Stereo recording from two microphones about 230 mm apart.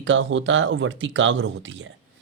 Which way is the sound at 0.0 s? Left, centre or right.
Right.